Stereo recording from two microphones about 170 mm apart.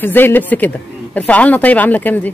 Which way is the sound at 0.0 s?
10° left (ahead or behind).